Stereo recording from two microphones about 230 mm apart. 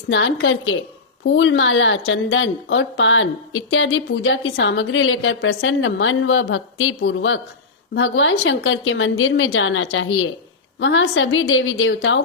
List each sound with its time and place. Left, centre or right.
0.1 s a woman's voice: left